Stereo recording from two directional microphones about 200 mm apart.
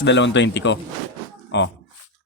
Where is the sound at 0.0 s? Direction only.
65° left (ahead or behind).